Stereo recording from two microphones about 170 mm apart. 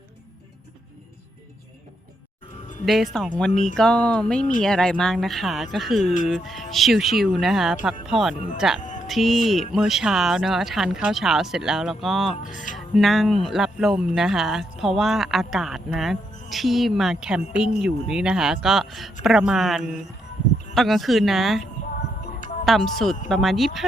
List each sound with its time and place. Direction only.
2.8 s speech: centre (ahead or behind)
8.8 s music: 50° left (ahead or behind)
9.0 s speech: centre (ahead or behind)